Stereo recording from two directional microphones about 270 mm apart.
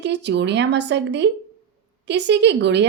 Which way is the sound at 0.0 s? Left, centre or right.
Right.